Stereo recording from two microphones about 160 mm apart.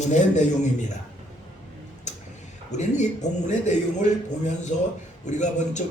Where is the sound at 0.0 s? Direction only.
50° left (ahead or behind).